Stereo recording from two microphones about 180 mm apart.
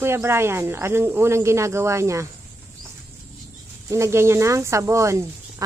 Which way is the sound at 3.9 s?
15° right (ahead or behind).